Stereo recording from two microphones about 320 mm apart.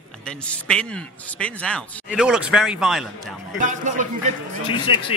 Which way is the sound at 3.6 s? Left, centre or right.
Right.